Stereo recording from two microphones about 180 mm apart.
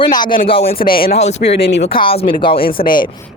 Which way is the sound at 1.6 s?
70° left (ahead or behind).